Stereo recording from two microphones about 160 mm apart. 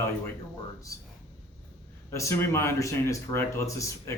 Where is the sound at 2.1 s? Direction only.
15° left (ahead or behind).